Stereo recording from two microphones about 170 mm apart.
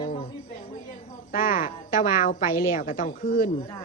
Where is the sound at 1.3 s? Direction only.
55° left (ahead or behind).